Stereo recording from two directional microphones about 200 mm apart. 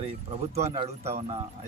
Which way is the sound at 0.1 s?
30° right (ahead or behind).